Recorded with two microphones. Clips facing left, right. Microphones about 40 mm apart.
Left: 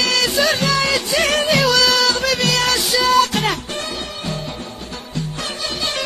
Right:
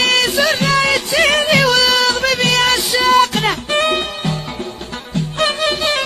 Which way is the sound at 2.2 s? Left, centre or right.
Right.